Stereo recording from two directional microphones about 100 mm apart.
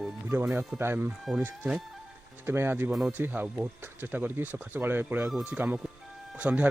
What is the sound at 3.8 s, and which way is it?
A man's voice, 20° right (ahead or behind).